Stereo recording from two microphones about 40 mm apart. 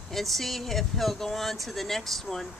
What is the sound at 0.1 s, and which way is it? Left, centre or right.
Speech, centre.